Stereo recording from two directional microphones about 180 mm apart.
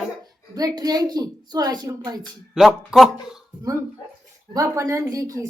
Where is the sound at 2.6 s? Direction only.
Centre (ahead or behind).